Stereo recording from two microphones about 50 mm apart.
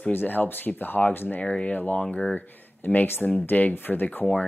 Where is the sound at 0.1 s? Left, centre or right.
Left.